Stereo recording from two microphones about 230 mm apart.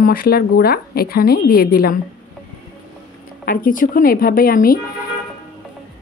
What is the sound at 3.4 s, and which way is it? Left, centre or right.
Speech, left.